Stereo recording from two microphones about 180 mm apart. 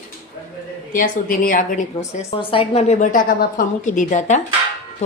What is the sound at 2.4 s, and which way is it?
A woman's voice, 30° left (ahead or behind).